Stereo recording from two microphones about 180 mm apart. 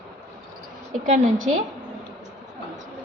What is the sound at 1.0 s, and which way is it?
Speech, 40° right (ahead or behind).